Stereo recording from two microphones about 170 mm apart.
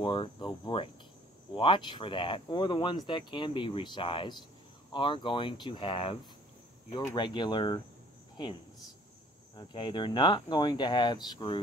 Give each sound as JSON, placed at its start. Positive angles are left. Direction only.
{"t": 0.0, "sound": "speech", "side_deg": 30}
{"t": 9.6, "sound": "speech", "side_deg": 25}